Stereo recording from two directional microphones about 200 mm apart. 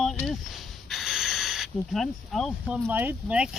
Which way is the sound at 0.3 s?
Centre (ahead or behind).